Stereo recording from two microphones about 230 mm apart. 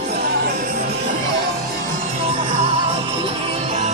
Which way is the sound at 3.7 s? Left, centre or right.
Right.